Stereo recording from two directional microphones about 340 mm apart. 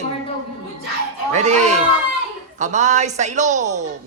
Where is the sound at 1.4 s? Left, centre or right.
Centre.